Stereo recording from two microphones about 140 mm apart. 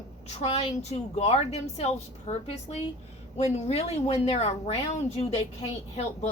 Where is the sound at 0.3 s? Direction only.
50° left (ahead or behind).